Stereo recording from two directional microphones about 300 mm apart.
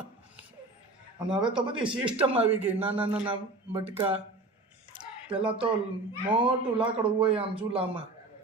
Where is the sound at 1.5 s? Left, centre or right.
Centre.